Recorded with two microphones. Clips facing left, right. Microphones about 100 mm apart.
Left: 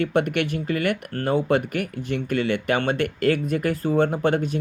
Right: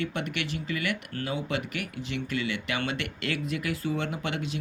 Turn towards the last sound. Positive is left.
turn(degrees=45)  # may be behind; listen again after turning